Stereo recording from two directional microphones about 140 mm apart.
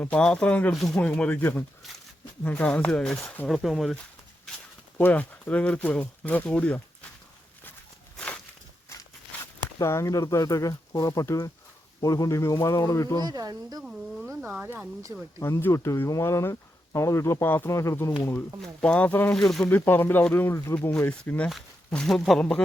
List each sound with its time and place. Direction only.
0.0 s speech: 10° left (ahead or behind)
4.9 s speech: 10° left (ahead or behind)
8.1 s walk: 10° left (ahead or behind)
9.7 s speech: 20° left (ahead or behind)
13.2 s speech: 25° right (ahead or behind)
14.5 s speech: 10° right (ahead or behind)
15.4 s speech: 20° left (ahead or behind)
18.6 s speech: 5° left (ahead or behind)
19.3 s speech: centre (ahead or behind)
19.6 s speech: 15° left (ahead or behind)
20.7 s speech: 5° left (ahead or behind)